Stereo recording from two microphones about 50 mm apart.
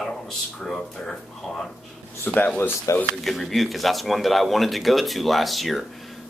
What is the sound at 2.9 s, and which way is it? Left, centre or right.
Speech, left.